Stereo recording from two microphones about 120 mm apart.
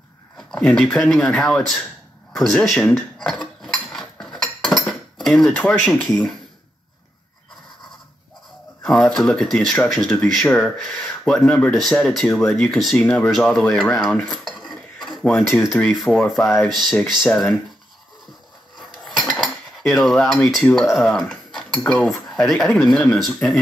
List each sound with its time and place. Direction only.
0.4 s speech: 5° left (ahead or behind)
2.3 s cutlery: centre (ahead or behind)
5.7 s speech: centre (ahead or behind)
8.8 s speech: 5° left (ahead or behind)
12.9 s speech: 15° left (ahead or behind)
13.3 s speech: 5° left (ahead or behind)
19.0 s cutlery: centre (ahead or behind)
22.8 s speech: centre (ahead or behind)